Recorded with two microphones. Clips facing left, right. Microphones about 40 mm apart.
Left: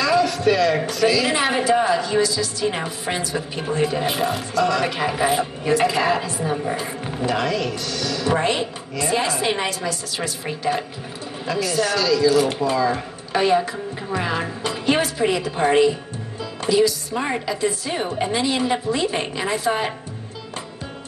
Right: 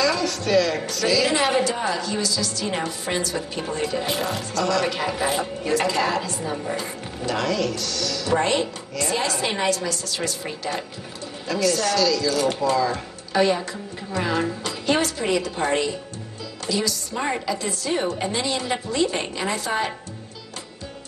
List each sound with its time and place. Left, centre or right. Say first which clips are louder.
0.0 s a woman's voice: left 5 dB; centre